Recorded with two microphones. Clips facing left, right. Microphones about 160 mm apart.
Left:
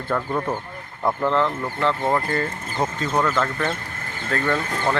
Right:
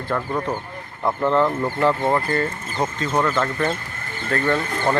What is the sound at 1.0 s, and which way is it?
Speech, 5° right (ahead or behind).